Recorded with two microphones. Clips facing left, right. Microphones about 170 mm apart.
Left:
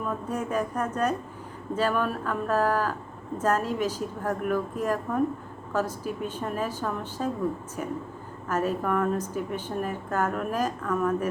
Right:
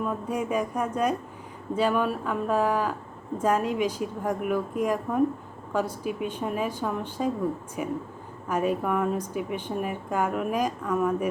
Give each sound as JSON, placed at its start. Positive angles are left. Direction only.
{"t": 0.0, "sound": "a woman's voice", "side_deg": -10}